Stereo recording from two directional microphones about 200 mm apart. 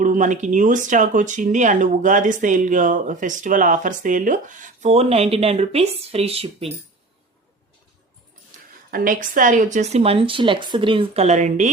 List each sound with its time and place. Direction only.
0.0 s speech: 40° right (ahead or behind)
8.9 s speech: 45° right (ahead or behind)